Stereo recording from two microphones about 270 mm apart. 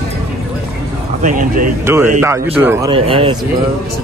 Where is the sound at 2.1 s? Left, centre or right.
Centre.